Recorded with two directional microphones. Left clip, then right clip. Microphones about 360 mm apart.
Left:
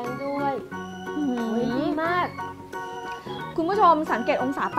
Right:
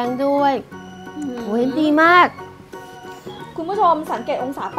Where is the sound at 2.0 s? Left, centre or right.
Right.